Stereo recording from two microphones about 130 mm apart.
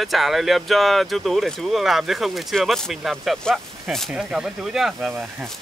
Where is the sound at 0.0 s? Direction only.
Centre (ahead or behind).